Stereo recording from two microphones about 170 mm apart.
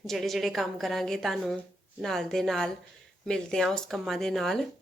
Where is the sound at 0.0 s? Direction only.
Centre (ahead or behind).